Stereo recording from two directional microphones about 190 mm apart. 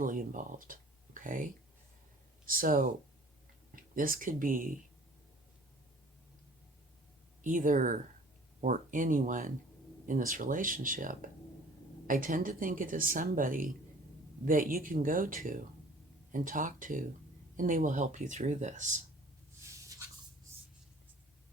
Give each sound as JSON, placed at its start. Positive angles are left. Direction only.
{"t": 0.0, "sound": "speech", "side_deg": -45}
{"t": 7.4, "sound": "speech", "side_deg": -45}